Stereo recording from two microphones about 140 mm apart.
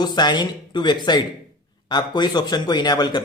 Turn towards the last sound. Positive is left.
turn(degrees=30)  # may be behind; listen again after turning